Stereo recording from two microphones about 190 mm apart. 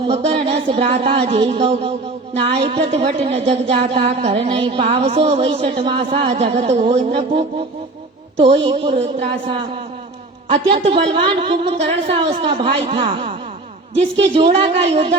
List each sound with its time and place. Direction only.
0.1 s speech: 30° right (ahead or behind)
8.6 s a woman's voice: 30° right (ahead or behind)
14.3 s speech: 30° right (ahead or behind)